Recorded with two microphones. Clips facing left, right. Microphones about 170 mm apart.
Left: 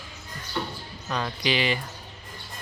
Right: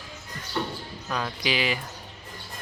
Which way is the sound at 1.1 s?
Centre (ahead or behind).